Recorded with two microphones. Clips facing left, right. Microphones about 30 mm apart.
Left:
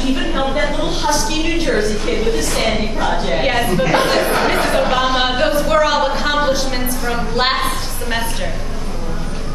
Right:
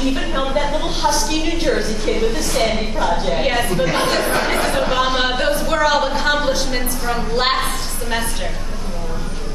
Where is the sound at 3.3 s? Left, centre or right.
Centre.